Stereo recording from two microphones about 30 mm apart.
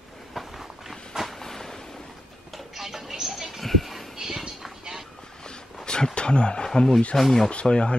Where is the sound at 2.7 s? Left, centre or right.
Centre.